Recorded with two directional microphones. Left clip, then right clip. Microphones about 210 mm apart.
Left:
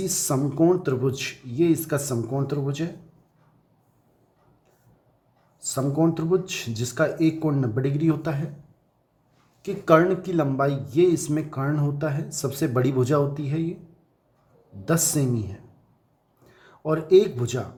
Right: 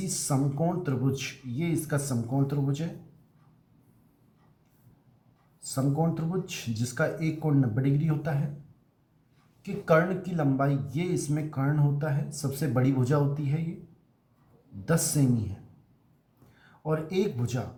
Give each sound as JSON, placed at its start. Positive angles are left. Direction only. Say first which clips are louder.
{"t": 0.1, "sound": "speech", "louder": "left 5 dB", "side_deg": 35}
{"t": 5.5, "sound": "speech", "louder": "left 6 dB", "side_deg": 35}
{"t": 9.6, "sound": "speech", "louder": "left 6 dB", "side_deg": 40}
{"t": 14.8, "sound": "speech", "louder": "left 5 dB", "side_deg": 35}
{"t": 16.8, "sound": "speech", "louder": "left 10 dB", "side_deg": 35}